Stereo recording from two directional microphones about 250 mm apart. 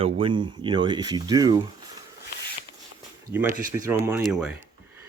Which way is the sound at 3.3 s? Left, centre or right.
Centre.